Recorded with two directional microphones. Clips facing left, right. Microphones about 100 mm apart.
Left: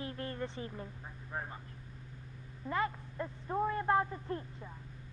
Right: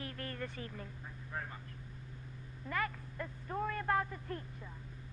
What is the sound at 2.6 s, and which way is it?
Speech, 25° left (ahead or behind).